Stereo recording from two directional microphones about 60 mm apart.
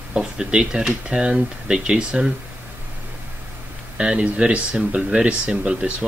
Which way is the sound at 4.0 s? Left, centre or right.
Centre.